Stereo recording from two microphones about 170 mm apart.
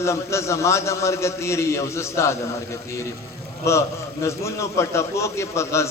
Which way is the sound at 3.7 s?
15° left (ahead or behind).